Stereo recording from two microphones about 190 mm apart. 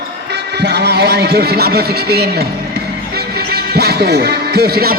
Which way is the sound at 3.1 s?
55° right (ahead or behind).